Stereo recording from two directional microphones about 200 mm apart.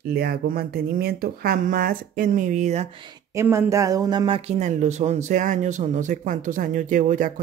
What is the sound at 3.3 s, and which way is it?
Speech, 15° right (ahead or behind).